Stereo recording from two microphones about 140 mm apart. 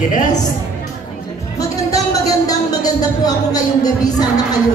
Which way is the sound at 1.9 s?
25° left (ahead or behind).